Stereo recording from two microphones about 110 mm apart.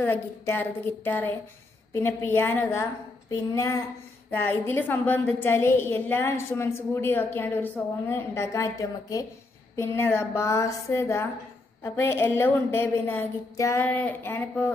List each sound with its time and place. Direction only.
0.0 s a woman's voice: 15° left (ahead or behind); by 3.8 s 30° left (ahead or behind)
4.3 s a woman's voice: 20° left (ahead or behind)
13.8 s a woman's voice: 15° left (ahead or behind)